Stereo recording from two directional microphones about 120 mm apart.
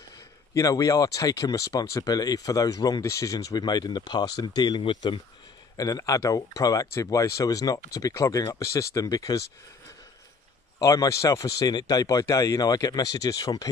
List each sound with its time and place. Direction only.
0.6 s speech: 25° left (ahead or behind)
5.8 s speech: 30° left (ahead or behind)
10.8 s speech: 30° left (ahead or behind)